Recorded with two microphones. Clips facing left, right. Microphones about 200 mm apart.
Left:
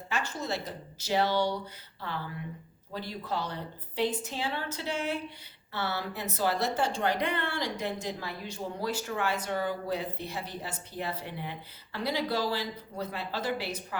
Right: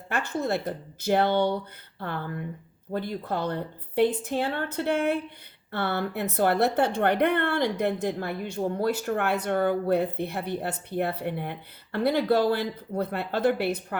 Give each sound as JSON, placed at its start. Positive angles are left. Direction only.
{"t": 0.1, "sound": "a woman's voice", "side_deg": -55}